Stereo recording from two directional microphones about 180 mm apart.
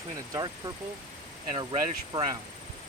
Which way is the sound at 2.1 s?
25° right (ahead or behind).